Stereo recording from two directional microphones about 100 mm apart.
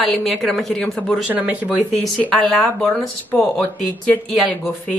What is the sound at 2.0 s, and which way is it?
A woman's voice, 5° left (ahead or behind).